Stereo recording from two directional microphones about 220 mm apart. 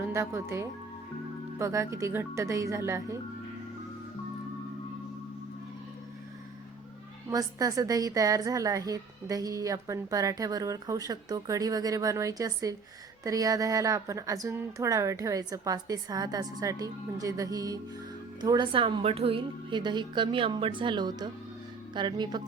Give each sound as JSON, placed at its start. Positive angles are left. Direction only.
{"t": 0.1, "sound": "a woman's voice", "side_deg": -10}
{"t": 7.3, "sound": "a woman's voice", "side_deg": -15}